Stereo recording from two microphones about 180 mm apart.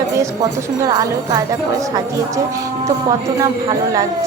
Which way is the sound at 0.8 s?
20° right (ahead or behind).